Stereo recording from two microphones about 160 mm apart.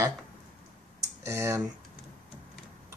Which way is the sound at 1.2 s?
20° right (ahead or behind).